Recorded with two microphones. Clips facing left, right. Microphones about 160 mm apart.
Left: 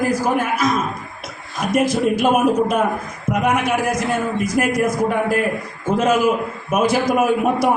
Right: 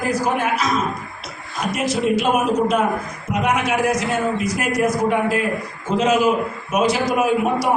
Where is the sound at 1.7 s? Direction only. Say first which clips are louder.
Left 3 dB; 50° left (ahead or behind).